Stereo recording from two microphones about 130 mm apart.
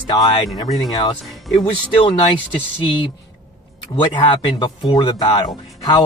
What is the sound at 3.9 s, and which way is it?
Speech, 40° left (ahead or behind).